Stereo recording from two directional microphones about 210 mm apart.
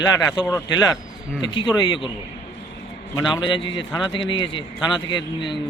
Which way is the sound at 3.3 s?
25° left (ahead or behind).